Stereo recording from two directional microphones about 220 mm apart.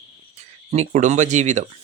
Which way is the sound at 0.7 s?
30° right (ahead or behind).